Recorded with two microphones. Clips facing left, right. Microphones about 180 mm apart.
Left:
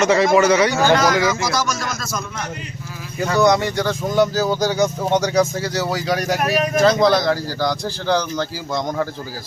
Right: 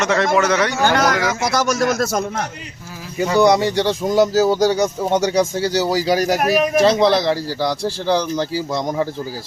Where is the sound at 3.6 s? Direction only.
30° right (ahead or behind).